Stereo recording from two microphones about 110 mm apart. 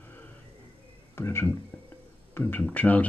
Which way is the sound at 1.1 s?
20° left (ahead or behind).